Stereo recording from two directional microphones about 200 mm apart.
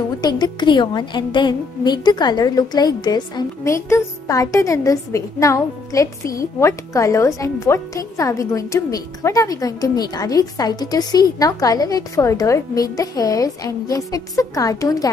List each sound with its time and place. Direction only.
0.2 s a woman's voice: 20° left (ahead or behind)